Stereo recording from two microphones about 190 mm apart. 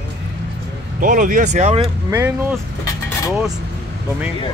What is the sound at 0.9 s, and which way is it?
Speech, 45° right (ahead or behind).